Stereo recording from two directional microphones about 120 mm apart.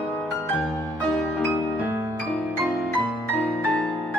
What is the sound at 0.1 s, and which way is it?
Music, centre (ahead or behind).